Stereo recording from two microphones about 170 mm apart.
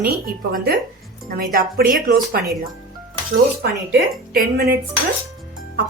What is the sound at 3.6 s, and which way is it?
Speech, 65° right (ahead or behind).